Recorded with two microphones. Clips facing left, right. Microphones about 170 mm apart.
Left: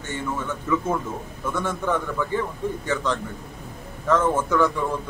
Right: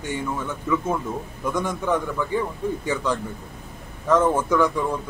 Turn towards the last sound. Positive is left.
turn(degrees=-10)  # may be behind; listen again after turning